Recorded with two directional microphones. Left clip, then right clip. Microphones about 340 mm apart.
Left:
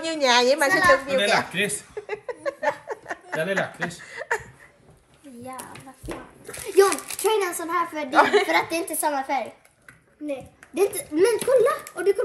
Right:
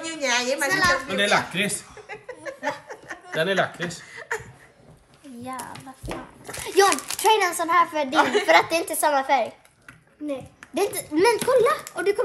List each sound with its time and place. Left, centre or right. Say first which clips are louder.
0.0 s a sound: left 5 dB; centre
5.4 s a child's voice: right 3 dB; centre
10.7 s a child's voice: left 1 dB; centre